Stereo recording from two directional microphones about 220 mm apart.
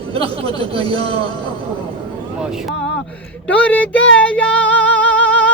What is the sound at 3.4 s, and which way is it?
Speech, 5° left (ahead or behind).